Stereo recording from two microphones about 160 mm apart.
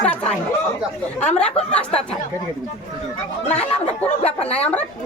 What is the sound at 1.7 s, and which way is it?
Speech, 5° left (ahead or behind).